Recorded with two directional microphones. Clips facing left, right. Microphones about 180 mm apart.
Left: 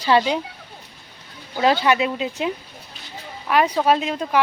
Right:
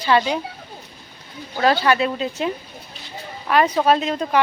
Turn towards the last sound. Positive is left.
turn(degrees=5)  # may be behind; listen again after turning